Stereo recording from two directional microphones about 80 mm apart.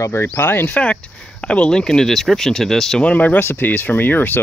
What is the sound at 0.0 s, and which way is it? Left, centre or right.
Speech, left.